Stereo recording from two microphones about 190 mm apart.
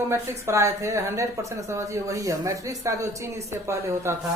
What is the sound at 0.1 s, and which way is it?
A woman's voice, 15° right (ahead or behind).